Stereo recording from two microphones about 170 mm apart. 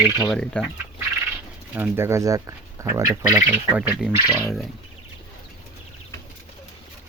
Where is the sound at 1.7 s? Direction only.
10° right (ahead or behind).